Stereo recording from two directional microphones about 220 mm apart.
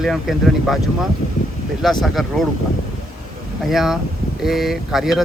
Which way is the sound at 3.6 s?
Centre (ahead or behind).